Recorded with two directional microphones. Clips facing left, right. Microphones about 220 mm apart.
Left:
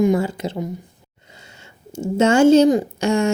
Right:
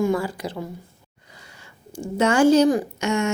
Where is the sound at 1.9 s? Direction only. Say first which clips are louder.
Left 5 dB; 25° left (ahead or behind).